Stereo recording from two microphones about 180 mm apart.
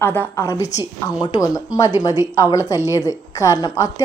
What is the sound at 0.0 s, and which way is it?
A woman's voice, 10° left (ahead or behind).